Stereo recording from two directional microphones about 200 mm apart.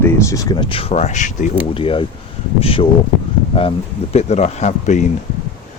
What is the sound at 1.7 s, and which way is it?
Speech, 25° left (ahead or behind).